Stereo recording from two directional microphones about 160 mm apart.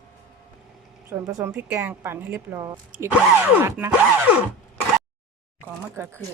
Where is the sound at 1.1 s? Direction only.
20° right (ahead or behind).